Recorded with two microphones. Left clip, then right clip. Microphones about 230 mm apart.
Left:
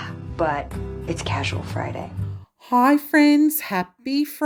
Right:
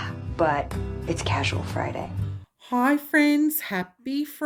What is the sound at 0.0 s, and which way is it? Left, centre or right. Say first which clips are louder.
Speech: even; centre.